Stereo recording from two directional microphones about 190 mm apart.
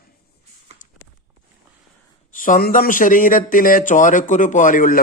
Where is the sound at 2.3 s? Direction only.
45° left (ahead or behind).